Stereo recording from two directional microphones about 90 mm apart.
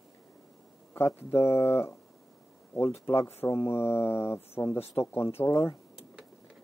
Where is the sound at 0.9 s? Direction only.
30° left (ahead or behind).